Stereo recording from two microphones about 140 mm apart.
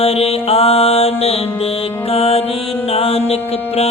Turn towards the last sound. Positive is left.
turn(degrees=45)  # may be behind; listen again after turning